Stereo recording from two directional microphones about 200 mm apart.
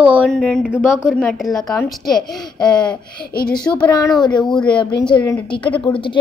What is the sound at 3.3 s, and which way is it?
Speech, 50° left (ahead or behind).